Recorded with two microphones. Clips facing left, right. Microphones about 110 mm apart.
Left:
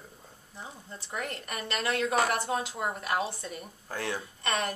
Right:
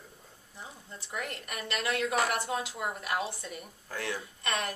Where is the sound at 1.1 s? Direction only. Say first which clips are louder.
Left 2 dB; 30° left (ahead or behind).